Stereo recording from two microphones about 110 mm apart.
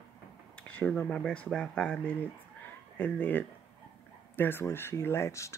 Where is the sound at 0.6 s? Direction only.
15° left (ahead or behind).